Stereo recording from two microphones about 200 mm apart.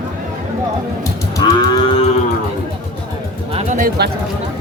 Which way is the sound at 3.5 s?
35° right (ahead or behind).